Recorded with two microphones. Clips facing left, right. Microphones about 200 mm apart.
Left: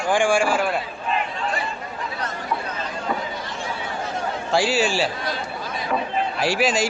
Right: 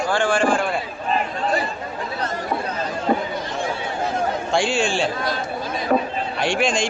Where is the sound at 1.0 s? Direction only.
40° right (ahead or behind).